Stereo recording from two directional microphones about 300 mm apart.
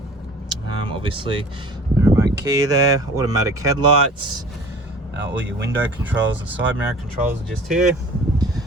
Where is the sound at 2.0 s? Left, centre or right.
Centre.